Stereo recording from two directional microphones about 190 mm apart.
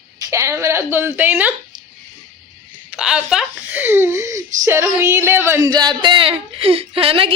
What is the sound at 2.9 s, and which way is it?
Speech, 5° right (ahead or behind).